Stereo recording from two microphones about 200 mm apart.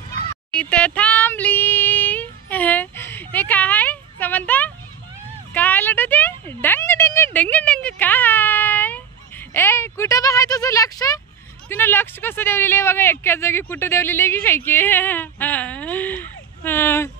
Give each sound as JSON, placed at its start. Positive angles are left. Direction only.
{"t": 0.6, "sound": "child singing", "side_deg": 5}
{"t": 5.5, "sound": "a sound", "side_deg": 10}
{"t": 7.3, "sound": "speech", "side_deg": 5}